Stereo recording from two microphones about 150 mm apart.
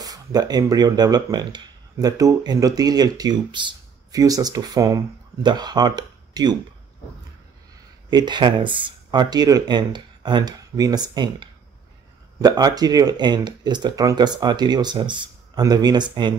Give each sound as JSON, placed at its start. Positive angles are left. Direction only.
{"t": 0.0, "sound": "speech", "side_deg": -25}
{"t": 8.1, "sound": "speech", "side_deg": -30}